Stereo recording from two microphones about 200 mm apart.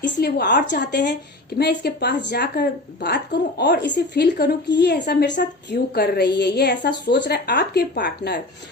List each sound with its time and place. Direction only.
0.0 s a woman's voice: 55° left (ahead or behind)